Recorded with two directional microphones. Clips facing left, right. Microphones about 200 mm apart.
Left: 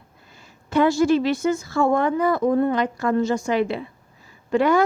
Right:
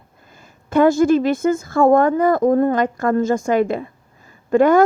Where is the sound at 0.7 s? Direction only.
50° right (ahead or behind).